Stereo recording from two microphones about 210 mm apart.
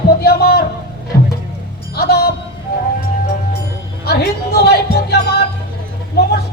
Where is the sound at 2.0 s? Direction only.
50° left (ahead or behind).